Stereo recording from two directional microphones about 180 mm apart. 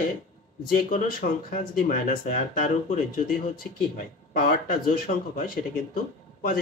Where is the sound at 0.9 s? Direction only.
50° left (ahead or behind).